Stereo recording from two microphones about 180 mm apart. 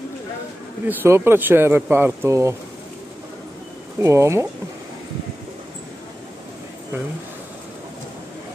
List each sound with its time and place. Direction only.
0.8 s speech: 15° right (ahead or behind)
4.0 s speech: 15° right (ahead or behind)